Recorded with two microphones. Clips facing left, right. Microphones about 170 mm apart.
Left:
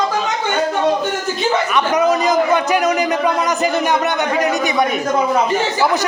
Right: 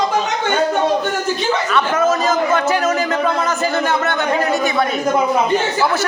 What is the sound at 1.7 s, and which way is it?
A man's voice, 15° left (ahead or behind).